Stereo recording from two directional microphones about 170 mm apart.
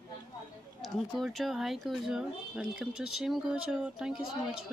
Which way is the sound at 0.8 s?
Centre (ahead or behind).